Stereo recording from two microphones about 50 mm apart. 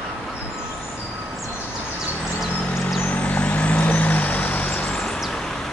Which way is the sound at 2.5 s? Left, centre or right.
Left.